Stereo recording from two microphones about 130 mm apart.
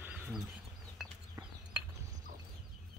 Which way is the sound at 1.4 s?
20° right (ahead or behind).